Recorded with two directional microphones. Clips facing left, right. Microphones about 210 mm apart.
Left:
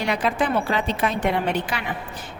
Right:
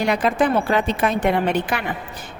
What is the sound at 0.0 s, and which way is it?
A woman's voice, 45° right (ahead or behind).